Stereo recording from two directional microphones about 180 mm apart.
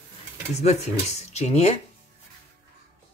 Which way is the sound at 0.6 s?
40° left (ahead or behind).